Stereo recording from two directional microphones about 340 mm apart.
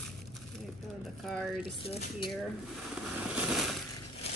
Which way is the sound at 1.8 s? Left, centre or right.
Centre.